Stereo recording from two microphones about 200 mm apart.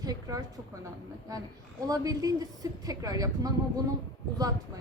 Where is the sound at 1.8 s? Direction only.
20° right (ahead or behind).